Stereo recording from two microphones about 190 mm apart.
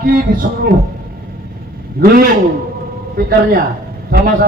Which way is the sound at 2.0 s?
50° right (ahead or behind).